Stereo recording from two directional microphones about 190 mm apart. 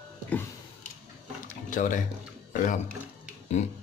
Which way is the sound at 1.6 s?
45° left (ahead or behind).